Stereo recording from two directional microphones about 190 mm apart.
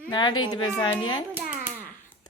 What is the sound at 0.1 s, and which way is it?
Speech, 25° left (ahead or behind).